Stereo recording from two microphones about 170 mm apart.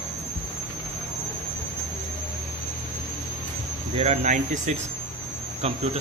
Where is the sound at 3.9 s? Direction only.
40° right (ahead or behind).